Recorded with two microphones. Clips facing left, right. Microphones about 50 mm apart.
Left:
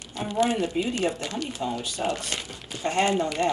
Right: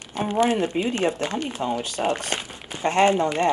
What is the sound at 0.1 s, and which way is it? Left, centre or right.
Speech, right.